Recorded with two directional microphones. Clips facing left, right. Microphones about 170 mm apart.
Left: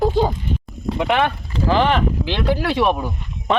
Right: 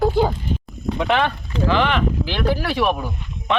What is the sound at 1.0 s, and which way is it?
Speech, 15° left (ahead or behind).